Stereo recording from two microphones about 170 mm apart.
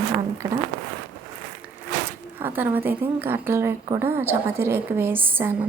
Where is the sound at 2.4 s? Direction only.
10° right (ahead or behind).